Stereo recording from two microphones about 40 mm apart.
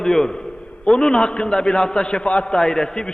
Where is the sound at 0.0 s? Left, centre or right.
Centre.